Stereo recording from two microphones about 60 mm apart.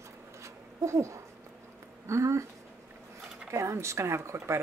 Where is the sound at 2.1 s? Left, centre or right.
Right.